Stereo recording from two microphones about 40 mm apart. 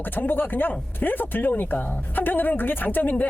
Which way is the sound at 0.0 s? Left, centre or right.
Left.